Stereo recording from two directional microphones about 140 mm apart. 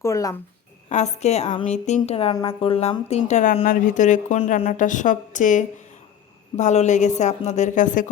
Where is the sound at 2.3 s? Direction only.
35° left (ahead or behind).